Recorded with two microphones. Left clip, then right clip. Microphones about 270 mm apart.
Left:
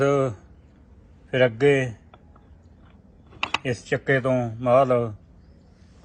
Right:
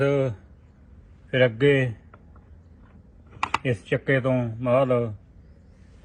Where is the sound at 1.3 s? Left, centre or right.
Centre.